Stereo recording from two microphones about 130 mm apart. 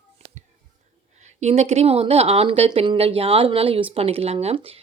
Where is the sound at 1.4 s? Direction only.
55° right (ahead or behind).